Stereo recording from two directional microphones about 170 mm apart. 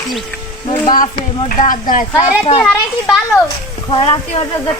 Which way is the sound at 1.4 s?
50° left (ahead or behind).